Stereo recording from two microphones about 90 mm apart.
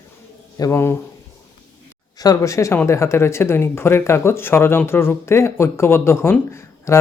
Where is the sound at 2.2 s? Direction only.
40° left (ahead or behind).